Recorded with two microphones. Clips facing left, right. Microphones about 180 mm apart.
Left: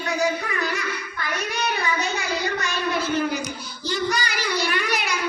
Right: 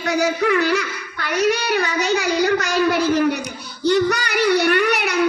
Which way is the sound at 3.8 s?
65° right (ahead or behind).